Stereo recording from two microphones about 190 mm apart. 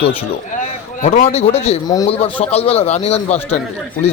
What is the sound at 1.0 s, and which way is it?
A man's voice, 40° left (ahead or behind).